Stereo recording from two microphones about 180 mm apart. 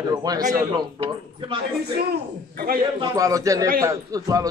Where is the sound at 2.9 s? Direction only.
20° right (ahead or behind).